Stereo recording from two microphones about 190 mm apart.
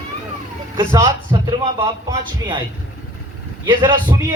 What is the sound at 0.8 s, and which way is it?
Speech, 15° right (ahead or behind).